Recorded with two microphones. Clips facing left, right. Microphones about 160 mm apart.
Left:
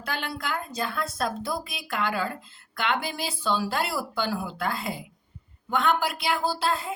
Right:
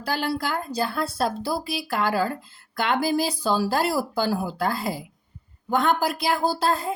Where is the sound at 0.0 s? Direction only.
35° right (ahead or behind).